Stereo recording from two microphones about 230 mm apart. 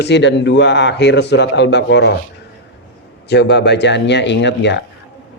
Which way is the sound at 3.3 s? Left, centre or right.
Left.